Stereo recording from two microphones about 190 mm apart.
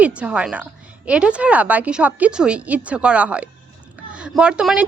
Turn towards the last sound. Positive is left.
turn(degrees=-5)  # may be behind; listen again after turning